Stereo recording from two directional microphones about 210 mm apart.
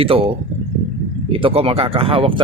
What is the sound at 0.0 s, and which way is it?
Speech, 25° right (ahead or behind).